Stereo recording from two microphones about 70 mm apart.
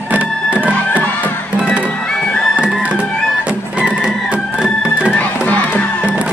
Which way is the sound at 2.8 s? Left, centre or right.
Centre.